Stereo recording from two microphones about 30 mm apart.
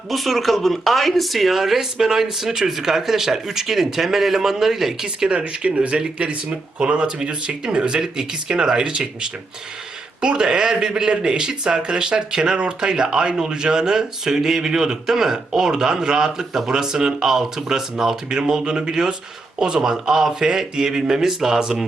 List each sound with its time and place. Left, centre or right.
0.1 s speech: centre
5.0 s speech: right
5.4 s speech: right; by 17.8 s centre
18.3 s speech: right